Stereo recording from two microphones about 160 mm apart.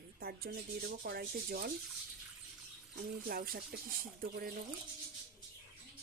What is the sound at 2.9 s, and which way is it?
Speech, 70° right (ahead or behind).